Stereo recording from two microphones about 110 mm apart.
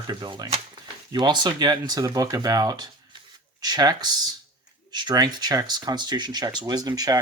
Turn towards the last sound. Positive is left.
turn(degrees=-35)  # may be behind; listen again after turning